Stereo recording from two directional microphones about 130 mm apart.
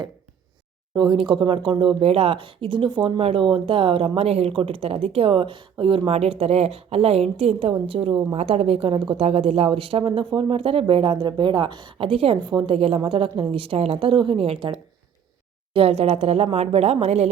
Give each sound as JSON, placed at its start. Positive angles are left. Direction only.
{"t": 0.9, "sound": "speech", "side_deg": -40}